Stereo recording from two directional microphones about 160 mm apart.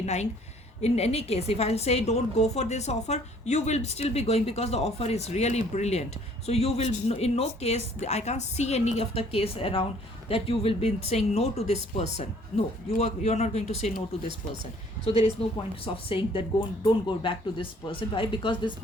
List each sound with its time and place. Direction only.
0.0 s a woman's voice: 45° left (ahead or behind)
15.0 s a woman's voice: 35° left (ahead or behind)